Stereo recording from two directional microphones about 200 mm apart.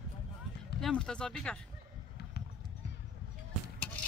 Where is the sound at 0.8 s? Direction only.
Centre (ahead or behind).